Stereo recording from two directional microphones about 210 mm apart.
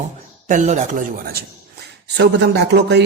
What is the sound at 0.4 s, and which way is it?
Speech, 35° right (ahead or behind).